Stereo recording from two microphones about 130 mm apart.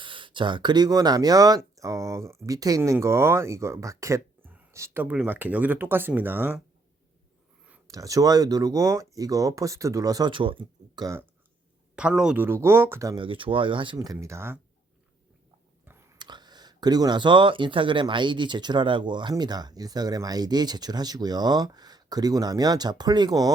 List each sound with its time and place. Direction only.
0.0 s speech: 40° right (ahead or behind); by 6.6 s 15° right (ahead or behind)
7.9 s speech: 25° right (ahead or behind)
11.9 s speech: 5° right (ahead or behind)
12.5 s speech: 20° right (ahead or behind)
13.1 s speech: 40° right (ahead or behind); by 14.6 s 20° right (ahead or behind)
15.8 s whispering: 15° right (ahead or behind)
16.1 s speech: 35° right (ahead or behind)